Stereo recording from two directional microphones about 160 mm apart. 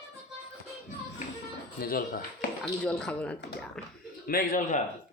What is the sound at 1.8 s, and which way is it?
Speech, 65° left (ahead or behind).